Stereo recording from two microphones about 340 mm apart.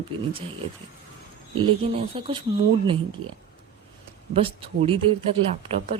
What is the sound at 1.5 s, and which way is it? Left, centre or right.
A woman's voice, centre.